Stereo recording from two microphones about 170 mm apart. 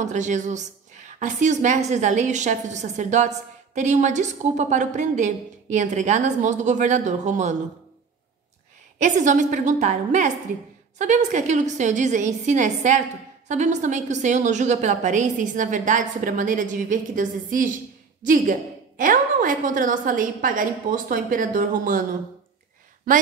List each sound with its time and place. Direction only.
0.0 s a woman's voice: 45° right (ahead or behind)
9.0 s a woman's voice: 45° right (ahead or behind)